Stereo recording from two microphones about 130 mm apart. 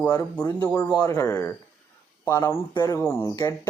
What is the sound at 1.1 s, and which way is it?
Speech, 20° left (ahead or behind).